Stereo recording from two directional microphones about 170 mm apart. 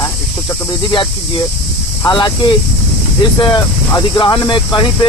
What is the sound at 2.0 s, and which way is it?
Speech, 25° left (ahead or behind).